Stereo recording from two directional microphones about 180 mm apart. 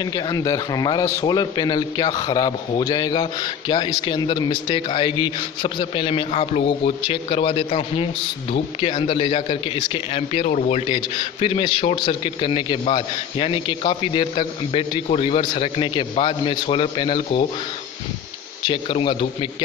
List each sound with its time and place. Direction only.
0.0 s a man's voice: 20° left (ahead or behind)
18.7 s a man's voice: 30° left (ahead or behind)